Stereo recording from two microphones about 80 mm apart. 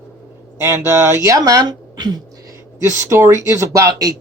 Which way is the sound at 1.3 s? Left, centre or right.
Right.